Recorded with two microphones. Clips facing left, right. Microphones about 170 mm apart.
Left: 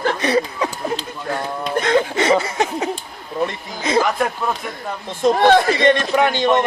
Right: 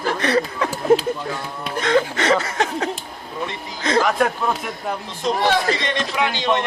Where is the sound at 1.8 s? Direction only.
10° left (ahead or behind).